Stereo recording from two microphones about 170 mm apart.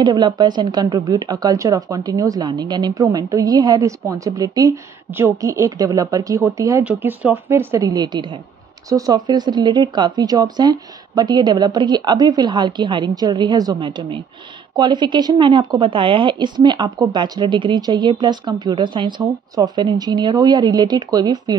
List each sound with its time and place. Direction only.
0.0 s speech: 25° right (ahead or behind)